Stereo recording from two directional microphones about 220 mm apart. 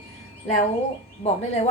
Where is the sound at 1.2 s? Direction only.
30° left (ahead or behind).